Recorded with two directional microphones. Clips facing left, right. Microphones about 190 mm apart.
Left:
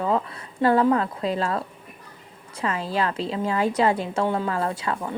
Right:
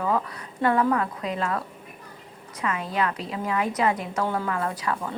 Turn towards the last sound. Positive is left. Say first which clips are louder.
# left 2 dB
turn(degrees=25)  # may be behind; listen again after turning